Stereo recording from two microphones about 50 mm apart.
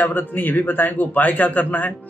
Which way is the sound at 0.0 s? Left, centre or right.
Left.